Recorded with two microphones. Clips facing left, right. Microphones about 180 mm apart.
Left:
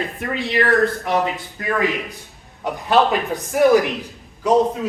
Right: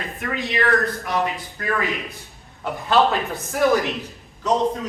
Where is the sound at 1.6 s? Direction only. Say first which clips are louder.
Left 4 dB; 20° left (ahead or behind).